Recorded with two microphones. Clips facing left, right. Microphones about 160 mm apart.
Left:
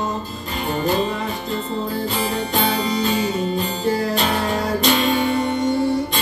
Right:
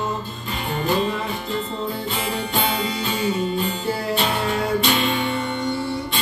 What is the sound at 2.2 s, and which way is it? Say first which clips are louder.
Music: left 2 dB; 35° left (ahead or behind).